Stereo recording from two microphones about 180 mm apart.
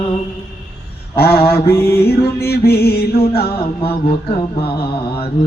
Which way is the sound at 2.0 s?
60° left (ahead or behind).